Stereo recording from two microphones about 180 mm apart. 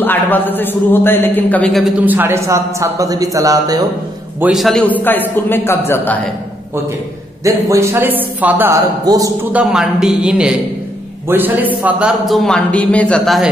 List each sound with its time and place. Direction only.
0.0 s a man's voice: 10° left (ahead or behind); by 3.8 s 20° right (ahead or behind)
4.4 s a man's voice: centre (ahead or behind)
7.4 s a man's voice: 15° right (ahead or behind)
9.0 s a man's voice: 20° right (ahead or behind)
9.5 s a man's voice: 5° right (ahead or behind)